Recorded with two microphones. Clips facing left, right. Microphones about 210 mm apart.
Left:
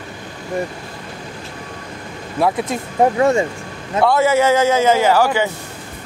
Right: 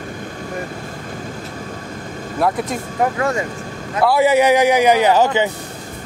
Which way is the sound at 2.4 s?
Centre (ahead or behind).